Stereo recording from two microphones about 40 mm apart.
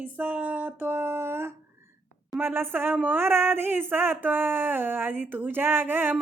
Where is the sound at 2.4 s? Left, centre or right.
Right.